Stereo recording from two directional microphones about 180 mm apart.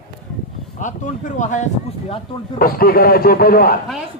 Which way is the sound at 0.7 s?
45° left (ahead or behind).